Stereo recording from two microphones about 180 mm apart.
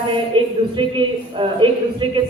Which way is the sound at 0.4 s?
30° right (ahead or behind).